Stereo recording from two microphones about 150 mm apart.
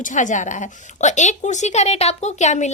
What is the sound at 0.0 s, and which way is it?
A woman's voice, 60° left (ahead or behind).